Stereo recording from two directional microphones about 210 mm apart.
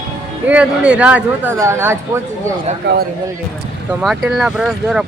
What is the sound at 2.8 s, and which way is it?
Speech, 50° right (ahead or behind).